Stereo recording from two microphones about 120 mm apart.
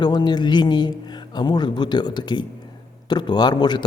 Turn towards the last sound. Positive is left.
turn(degrees=35)  # may be behind; listen again after turning